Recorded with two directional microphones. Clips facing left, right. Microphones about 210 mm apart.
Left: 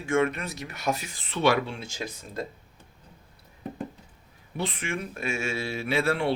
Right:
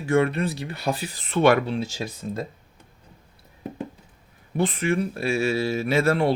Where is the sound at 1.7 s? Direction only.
35° right (ahead or behind).